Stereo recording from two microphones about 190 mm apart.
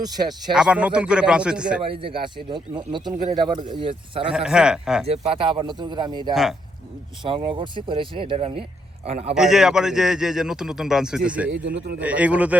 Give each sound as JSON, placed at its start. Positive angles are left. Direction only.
{"t": 0.0, "sound": "speech", "side_deg": -20}
{"t": 0.5, "sound": "a man's voice", "side_deg": -5}
{"t": 1.8, "sound": "speech", "side_deg": -30}
{"t": 4.3, "sound": "a man's voice", "side_deg": -5}
{"t": 5.0, "sound": "a man's voice", "side_deg": -30}
{"t": 9.3, "sound": "a man's voice", "side_deg": -5}
{"t": 11.5, "sound": "a man's voice", "side_deg": -65}
{"t": 11.9, "sound": "a man's voice", "side_deg": -5}